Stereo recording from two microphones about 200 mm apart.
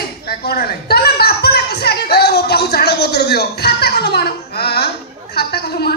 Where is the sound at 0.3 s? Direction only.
50° left (ahead or behind).